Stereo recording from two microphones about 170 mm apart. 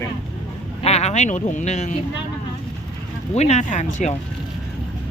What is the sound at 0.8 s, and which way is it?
Speech, 40° left (ahead or behind).